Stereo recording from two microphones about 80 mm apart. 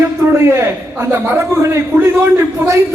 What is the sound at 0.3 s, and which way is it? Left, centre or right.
A man's voice, right.